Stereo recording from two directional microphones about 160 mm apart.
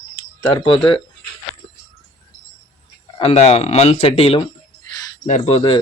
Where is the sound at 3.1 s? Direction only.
40° left (ahead or behind).